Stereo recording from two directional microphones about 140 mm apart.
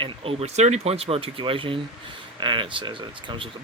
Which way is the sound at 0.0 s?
45° right (ahead or behind).